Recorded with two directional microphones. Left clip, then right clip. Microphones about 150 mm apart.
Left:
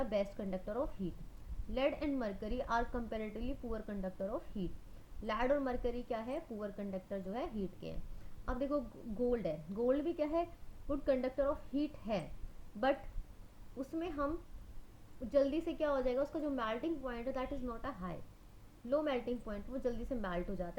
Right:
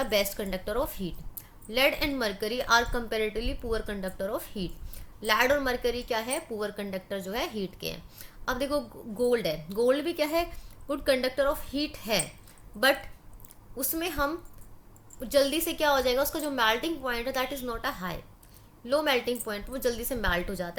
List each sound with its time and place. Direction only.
0.0 s a woman's voice: 15° right (ahead or behind)
13.8 s a woman's voice: 15° right (ahead or behind)